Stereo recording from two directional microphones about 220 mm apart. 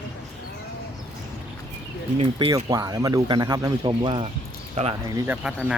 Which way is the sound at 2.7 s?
15° right (ahead or behind).